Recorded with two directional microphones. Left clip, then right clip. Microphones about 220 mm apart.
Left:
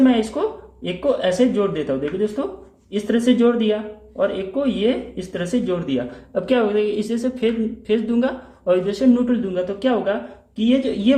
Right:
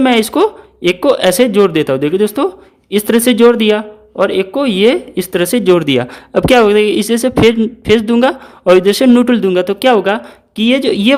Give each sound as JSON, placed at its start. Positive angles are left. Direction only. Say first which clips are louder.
{"t": 0.0, "sound": "speech", "louder": "right 8 dB", "side_deg": -50}